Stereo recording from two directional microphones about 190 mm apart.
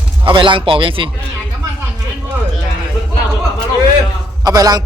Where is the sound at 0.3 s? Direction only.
25° right (ahead or behind).